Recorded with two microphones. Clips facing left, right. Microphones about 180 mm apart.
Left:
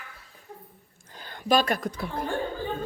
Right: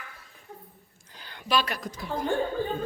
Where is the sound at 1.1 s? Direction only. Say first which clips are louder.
Left 4 dB; 45° left (ahead or behind).